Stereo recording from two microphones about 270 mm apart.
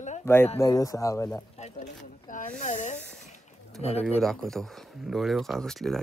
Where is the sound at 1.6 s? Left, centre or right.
Left.